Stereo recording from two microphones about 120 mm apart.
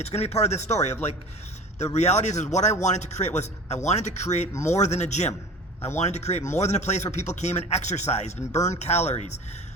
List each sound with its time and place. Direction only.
0.0 s speech: 60° left (ahead or behind)